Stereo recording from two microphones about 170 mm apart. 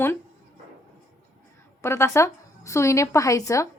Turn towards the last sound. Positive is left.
turn(degrees=20)  # may be behind; listen again after turning